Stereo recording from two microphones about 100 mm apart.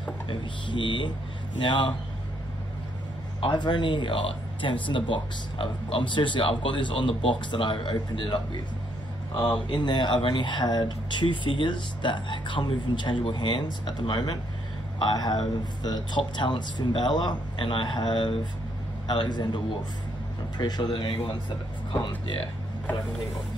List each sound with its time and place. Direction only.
0.3 s speech: 55° left (ahead or behind)
3.3 s speech: 50° left (ahead or behind)
9.5 s speech: 50° left (ahead or behind)